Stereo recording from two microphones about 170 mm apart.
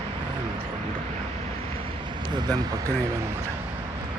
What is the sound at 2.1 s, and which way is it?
Speech, 25° right (ahead or behind).